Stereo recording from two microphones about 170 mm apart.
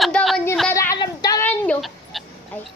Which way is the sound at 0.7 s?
20° left (ahead or behind).